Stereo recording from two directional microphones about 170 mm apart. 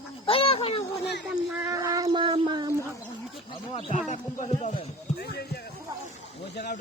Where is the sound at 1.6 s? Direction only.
20° right (ahead or behind).